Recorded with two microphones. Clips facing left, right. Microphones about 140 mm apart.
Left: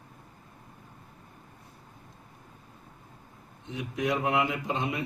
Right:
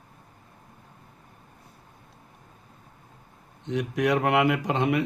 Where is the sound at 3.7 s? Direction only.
70° right (ahead or behind).